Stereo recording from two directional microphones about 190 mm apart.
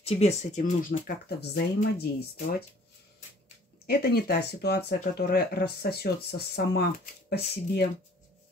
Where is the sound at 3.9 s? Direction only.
55° left (ahead or behind).